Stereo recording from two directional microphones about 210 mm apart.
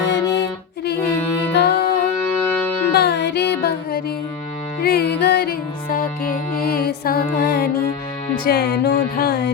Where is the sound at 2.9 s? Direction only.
50° left (ahead or behind).